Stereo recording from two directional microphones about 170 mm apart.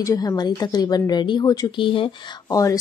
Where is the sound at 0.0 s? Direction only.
20° left (ahead or behind).